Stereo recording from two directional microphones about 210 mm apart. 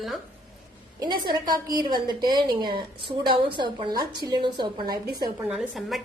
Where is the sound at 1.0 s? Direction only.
20° right (ahead or behind).